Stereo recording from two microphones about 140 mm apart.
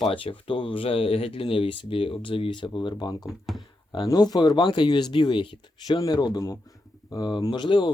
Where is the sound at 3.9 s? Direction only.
30° left (ahead or behind).